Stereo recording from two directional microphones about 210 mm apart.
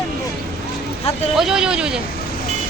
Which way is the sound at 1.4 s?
5° right (ahead or behind).